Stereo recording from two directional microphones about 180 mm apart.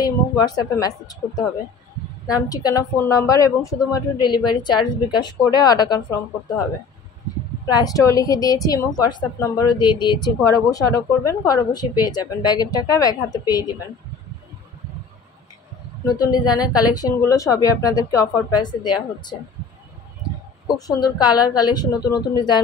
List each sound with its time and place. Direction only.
0.0 s a woman's voice: 20° left (ahead or behind)
7.6 s a woman's voice: 20° left (ahead or behind)
16.1 s a woman's voice: 20° left (ahead or behind)
20.6 s a woman's voice: 20° left (ahead or behind)